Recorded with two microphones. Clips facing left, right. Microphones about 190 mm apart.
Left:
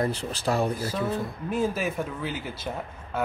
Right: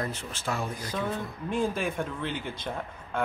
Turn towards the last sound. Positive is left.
turn(degrees=5)  # may be behind; listen again after turning